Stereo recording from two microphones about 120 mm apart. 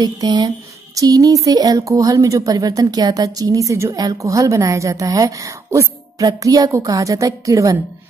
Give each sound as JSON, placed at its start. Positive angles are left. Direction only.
{"t": 0.0, "sound": "speech", "side_deg": -35}